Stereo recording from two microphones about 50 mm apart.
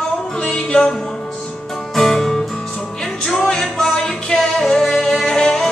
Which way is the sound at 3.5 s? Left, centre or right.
Centre.